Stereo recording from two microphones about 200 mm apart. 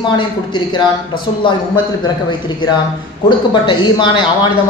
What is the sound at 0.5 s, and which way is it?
A man's voice, 20° left (ahead or behind).